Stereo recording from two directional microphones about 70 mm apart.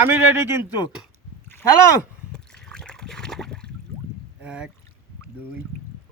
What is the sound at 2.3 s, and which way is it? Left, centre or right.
Water, centre.